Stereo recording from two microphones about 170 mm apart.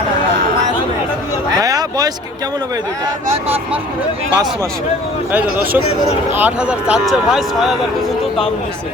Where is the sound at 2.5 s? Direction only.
25° right (ahead or behind).